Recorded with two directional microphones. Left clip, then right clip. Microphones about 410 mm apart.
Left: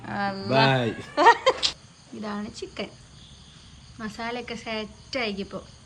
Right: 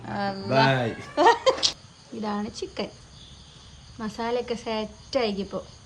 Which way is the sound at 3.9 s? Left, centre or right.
Centre.